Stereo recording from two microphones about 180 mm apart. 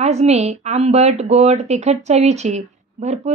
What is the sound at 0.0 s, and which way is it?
A woman's voice, 35° right (ahead or behind).